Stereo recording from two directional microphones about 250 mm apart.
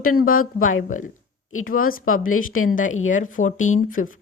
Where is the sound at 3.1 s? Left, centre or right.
Left.